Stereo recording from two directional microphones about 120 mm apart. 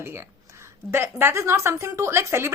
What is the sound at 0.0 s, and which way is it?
A woman's voice, 20° right (ahead or behind).